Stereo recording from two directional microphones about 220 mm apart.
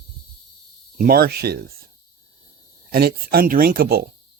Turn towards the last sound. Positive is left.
turn(degrees=-45)  # may be behind; listen again after turning